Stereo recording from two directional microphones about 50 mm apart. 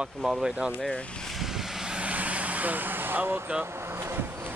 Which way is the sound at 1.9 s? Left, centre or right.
Right.